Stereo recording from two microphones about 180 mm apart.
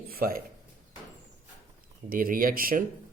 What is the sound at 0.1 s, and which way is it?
Speech, 55° right (ahead or behind).